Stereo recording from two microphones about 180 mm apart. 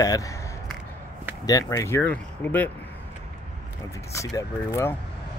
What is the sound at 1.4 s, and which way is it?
Speech, 20° left (ahead or behind).